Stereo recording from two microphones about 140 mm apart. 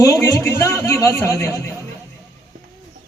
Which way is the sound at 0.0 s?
25° left (ahead or behind).